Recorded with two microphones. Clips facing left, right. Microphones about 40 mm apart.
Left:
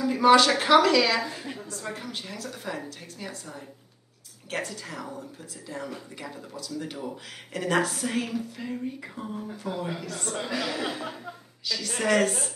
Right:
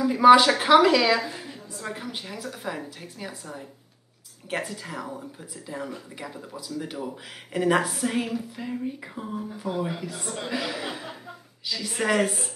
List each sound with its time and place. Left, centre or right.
0.0 s a woman's voice: centre